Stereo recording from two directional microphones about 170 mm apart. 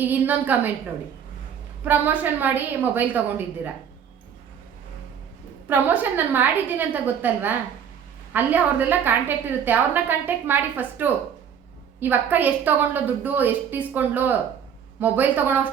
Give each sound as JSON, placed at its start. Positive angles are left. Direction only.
{"t": 0.0, "sound": "a woman's voice", "side_deg": -10}
{"t": 1.8, "sound": "a woman's voice", "side_deg": -10}
{"t": 5.6, "sound": "a woman's voice", "side_deg": -10}